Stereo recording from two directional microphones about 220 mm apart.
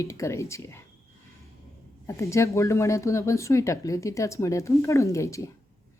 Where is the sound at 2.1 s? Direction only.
15° left (ahead or behind).